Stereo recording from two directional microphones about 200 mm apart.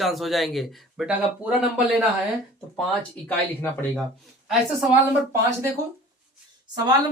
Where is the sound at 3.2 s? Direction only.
10° left (ahead or behind).